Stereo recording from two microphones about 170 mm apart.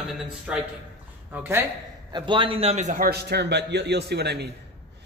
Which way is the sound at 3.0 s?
70° right (ahead or behind).